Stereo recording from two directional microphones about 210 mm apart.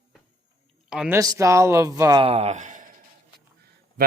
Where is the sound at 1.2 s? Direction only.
15° right (ahead or behind).